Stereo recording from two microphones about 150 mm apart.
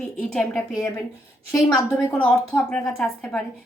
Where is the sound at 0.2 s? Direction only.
10° left (ahead or behind).